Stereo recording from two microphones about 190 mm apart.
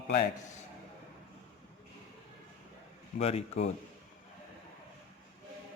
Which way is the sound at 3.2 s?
35° left (ahead or behind).